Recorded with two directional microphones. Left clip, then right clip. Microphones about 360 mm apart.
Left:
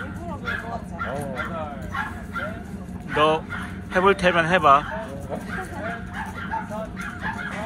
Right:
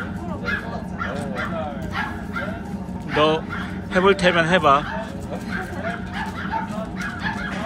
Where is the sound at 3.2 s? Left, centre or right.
Centre.